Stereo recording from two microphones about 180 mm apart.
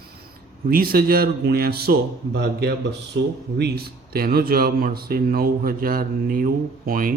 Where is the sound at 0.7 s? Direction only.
55° right (ahead or behind).